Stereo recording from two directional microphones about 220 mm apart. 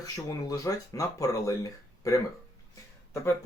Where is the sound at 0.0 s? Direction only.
15° left (ahead or behind).